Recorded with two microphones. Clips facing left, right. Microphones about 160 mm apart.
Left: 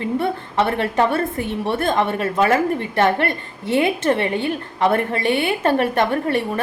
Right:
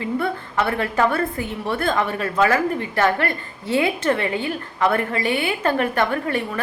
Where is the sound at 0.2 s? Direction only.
25° left (ahead or behind).